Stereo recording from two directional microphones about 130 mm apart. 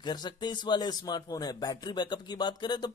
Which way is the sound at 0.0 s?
35° left (ahead or behind).